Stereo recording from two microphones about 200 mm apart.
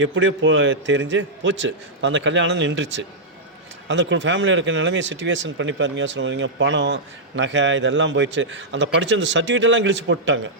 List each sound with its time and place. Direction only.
0.0 s a man's voice: 70° right (ahead or behind)